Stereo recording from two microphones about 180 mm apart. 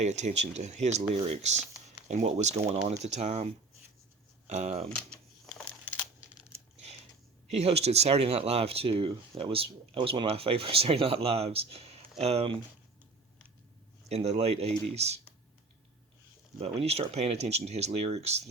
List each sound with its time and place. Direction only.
0.0 s speech: 40° right (ahead or behind)
5.5 s a sound: 10° left (ahead or behind)
7.5 s speech: 35° right (ahead or behind)
14.1 s speech: 35° right (ahead or behind)
16.6 s speech: 35° right (ahead or behind)